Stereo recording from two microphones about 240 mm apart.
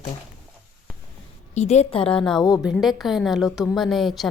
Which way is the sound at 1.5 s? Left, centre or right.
Left.